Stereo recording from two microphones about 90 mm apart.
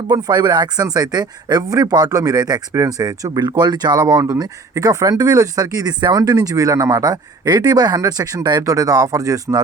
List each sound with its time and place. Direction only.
0.1 s speech: 45° right (ahead or behind)
4.2 s speech: 35° right (ahead or behind)